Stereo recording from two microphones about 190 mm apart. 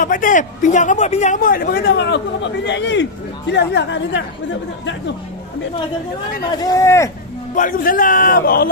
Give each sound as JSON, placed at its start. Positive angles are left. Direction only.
{"t": 0.0, "sound": "a man's voice", "side_deg": 45}
{"t": 6.5, "sound": "speech", "side_deg": 20}
{"t": 7.5, "sound": "a man's voice", "side_deg": 45}